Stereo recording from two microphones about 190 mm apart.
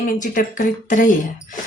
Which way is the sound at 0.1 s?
45° left (ahead or behind).